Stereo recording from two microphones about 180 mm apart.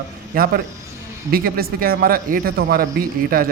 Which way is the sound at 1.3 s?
55° right (ahead or behind).